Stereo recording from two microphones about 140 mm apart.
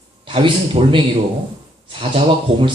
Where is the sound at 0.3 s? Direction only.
40° right (ahead or behind).